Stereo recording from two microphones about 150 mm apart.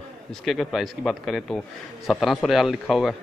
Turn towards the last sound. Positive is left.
turn(degrees=0)  # may be behind; listen again after turning